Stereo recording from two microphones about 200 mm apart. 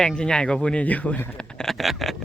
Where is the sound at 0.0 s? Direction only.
5° left (ahead or behind).